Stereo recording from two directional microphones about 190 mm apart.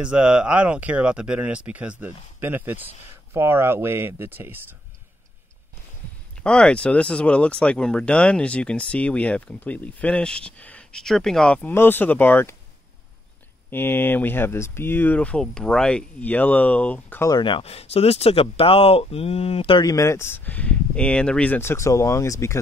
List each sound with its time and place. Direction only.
0.0 s speech: 5° right (ahead or behind)
6.4 s speech: 5° left (ahead or behind)
13.7 s speech: 10° left (ahead or behind)
17.4 s speech: 25° left (ahead or behind)